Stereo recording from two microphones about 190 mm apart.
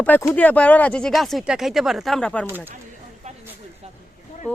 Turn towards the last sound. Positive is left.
turn(degrees=10)  # may be behind; listen again after turning